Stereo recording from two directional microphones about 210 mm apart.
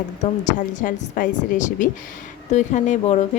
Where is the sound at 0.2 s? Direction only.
35° left (ahead or behind).